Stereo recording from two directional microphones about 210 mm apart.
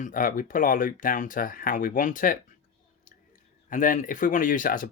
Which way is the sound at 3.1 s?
40° left (ahead or behind).